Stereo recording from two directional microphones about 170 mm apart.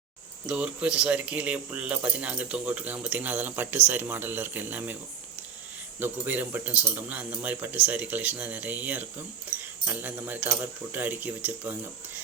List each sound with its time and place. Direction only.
0.4 s speech: 5° right (ahead or behind)
6.0 s speech: 10° right (ahead or behind)